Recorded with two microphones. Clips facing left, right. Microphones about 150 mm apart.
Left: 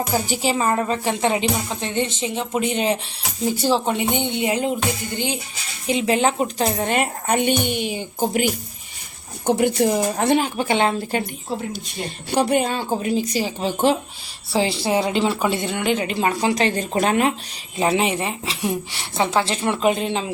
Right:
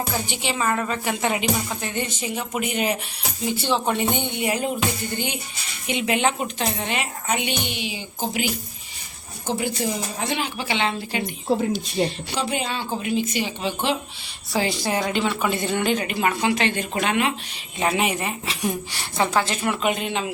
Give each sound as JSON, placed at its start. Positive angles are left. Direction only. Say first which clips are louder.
{"t": 0.3, "sound": "a woman's voice", "louder": "left 4 dB", "side_deg": 35}
{"t": 3.4, "sound": "a woman's voice", "louder": "left 4 dB", "side_deg": 40}
{"t": 3.8, "sound": "a woman's voice", "louder": "left 2 dB", "side_deg": 15}
{"t": 9.5, "sound": "speech", "louder": "left 7 dB", "side_deg": 60}
{"t": 10.3, "sound": "a woman's voice", "louder": "left 7 dB", "side_deg": 45}
{"t": 12.0, "sound": "a woman's voice", "louder": "left 5 dB", "side_deg": 55}
{"t": 14.5, "sound": "a woman's voice", "louder": "left 4 dB", "side_deg": 30}
{"t": 15.6, "sound": "a woman's voice", "louder": "left 1 dB", "side_deg": 15}